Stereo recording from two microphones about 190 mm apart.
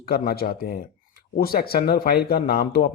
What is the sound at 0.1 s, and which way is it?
Speech, 55° left (ahead or behind).